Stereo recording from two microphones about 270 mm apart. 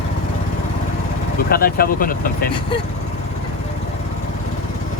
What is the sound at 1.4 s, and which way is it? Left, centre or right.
Speech, left.